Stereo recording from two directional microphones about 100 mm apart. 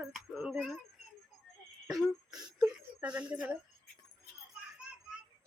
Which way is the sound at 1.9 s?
Centre (ahead or behind).